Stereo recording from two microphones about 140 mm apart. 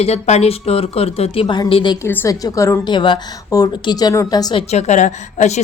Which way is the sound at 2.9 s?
35° left (ahead or behind).